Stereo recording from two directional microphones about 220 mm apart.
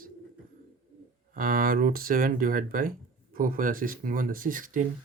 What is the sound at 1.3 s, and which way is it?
Speech, 40° right (ahead or behind).